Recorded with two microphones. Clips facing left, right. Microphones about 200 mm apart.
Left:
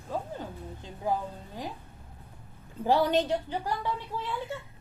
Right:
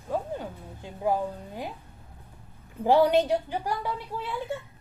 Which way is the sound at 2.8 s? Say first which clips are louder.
Right 4 dB; 15° right (ahead or behind).